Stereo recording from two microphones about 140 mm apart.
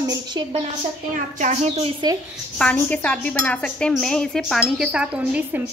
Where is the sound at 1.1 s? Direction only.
60° right (ahead or behind).